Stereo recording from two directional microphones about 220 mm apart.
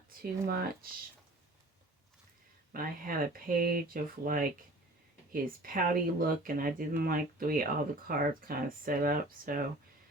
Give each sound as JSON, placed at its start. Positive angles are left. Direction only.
{"t": 0.4, "sound": "speech", "side_deg": -40}
{"t": 2.7, "sound": "speech", "side_deg": -40}